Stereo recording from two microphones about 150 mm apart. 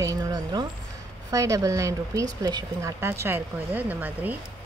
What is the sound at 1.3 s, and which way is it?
Speech, 20° right (ahead or behind).